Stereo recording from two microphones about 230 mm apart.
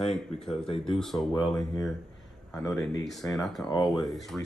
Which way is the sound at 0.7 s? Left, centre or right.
Left.